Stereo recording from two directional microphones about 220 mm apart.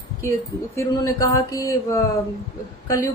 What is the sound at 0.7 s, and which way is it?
Speech, 15° left (ahead or behind).